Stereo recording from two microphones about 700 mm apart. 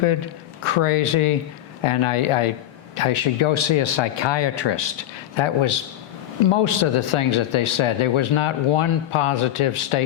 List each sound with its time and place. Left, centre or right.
0.6 s speech: left